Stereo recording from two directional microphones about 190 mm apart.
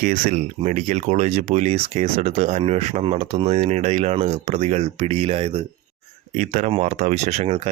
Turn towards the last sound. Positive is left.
turn(degrees=-35)  # may be behind; listen again after turning